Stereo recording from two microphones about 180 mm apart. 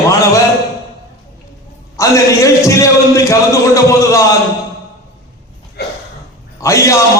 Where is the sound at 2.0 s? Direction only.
15° left (ahead or behind).